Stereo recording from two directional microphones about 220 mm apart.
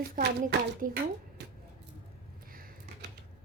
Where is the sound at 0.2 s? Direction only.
40° right (ahead or behind).